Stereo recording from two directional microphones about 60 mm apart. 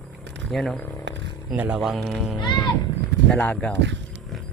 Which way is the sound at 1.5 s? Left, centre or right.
Right.